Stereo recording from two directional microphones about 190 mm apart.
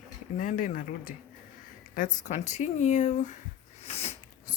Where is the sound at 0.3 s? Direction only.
45° left (ahead or behind).